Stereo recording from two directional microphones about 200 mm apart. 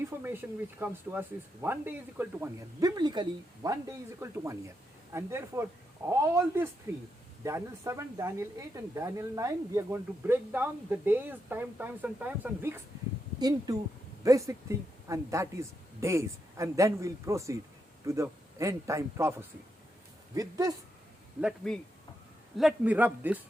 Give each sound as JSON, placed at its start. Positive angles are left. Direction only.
{"t": 0.0, "sound": "a man's voice", "side_deg": -10}
{"t": 21.4, "sound": "speech", "side_deg": 0}